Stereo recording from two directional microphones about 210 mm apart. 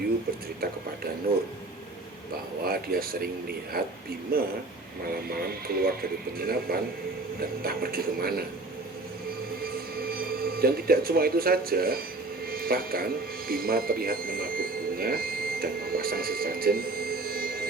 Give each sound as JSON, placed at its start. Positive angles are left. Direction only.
{"t": 1.3, "sound": "speech", "side_deg": -45}
{"t": 2.6, "sound": "speech", "side_deg": -45}
{"t": 9.9, "sound": "speech", "side_deg": -45}
{"t": 12.5, "sound": "music", "side_deg": -45}
{"t": 13.5, "sound": "speech", "side_deg": -45}